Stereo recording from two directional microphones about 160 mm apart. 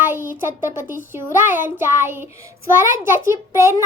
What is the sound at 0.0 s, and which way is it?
A child's voice, 15° right (ahead or behind).